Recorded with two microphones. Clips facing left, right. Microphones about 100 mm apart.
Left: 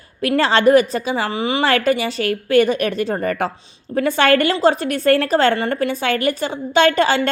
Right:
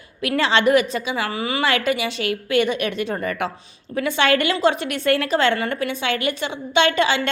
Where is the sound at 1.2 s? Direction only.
25° left (ahead or behind).